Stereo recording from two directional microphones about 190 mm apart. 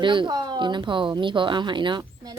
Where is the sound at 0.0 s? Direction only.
25° right (ahead or behind).